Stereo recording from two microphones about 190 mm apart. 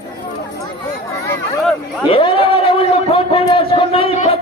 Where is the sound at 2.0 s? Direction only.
25° left (ahead or behind).